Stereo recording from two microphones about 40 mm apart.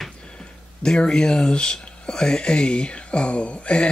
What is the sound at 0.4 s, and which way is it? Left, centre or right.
Speech, centre.